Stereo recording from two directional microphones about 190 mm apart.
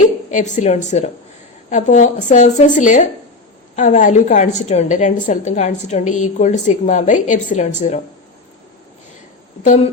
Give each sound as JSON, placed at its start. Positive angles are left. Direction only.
{"t": 0.3, "sound": "a woman's voice", "side_deg": 40}
{"t": 9.6, "sound": "a woman's voice", "side_deg": 35}